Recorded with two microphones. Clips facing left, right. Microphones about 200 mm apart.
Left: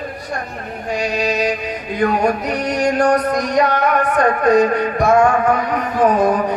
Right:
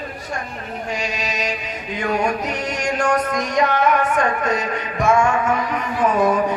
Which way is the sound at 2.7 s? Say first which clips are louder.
Left 5 dB; 35° left (ahead or behind).